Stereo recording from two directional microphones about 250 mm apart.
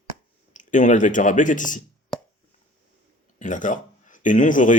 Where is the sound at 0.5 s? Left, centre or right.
Left.